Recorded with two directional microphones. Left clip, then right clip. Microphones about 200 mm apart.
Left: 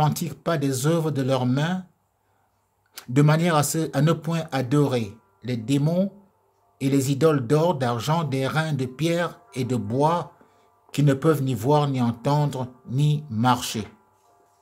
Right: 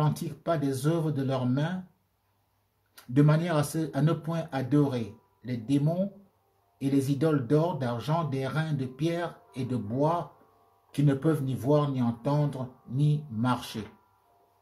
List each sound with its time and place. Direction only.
0.0 s speech: 50° left (ahead or behind)
2.9 s speech: 50° left (ahead or behind)